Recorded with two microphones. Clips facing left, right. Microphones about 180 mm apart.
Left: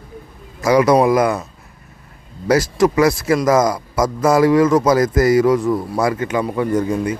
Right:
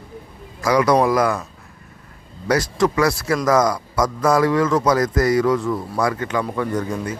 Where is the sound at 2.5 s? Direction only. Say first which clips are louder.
Left 4 dB; 20° left (ahead or behind).